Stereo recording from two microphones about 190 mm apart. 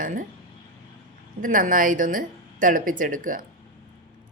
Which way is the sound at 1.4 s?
45° right (ahead or behind).